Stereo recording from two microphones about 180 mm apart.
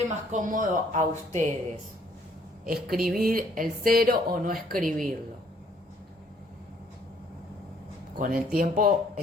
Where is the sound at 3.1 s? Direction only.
50° right (ahead or behind).